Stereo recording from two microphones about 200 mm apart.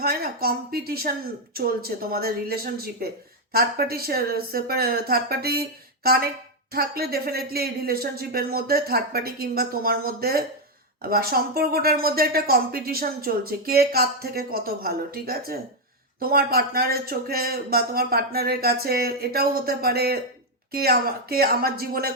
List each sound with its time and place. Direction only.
0.0 s a woman's voice: 50° right (ahead or behind)